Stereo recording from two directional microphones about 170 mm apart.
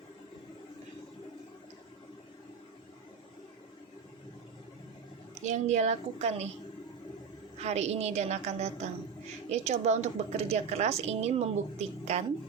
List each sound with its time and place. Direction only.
5.4 s a woman's voice: 45° right (ahead or behind)
7.6 s a woman's voice: 40° right (ahead or behind)